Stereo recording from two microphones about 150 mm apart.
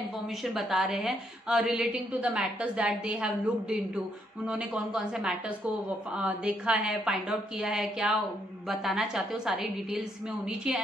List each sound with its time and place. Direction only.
0.4 s a woman's voice: centre (ahead or behind)